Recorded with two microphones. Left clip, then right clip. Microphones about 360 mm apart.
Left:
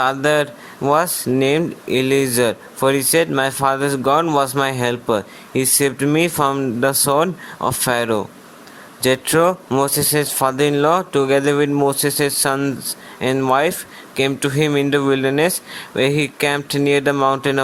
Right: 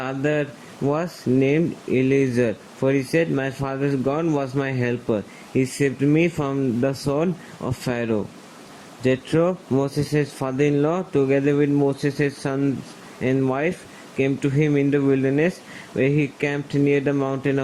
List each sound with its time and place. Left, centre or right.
0.0 s speech: left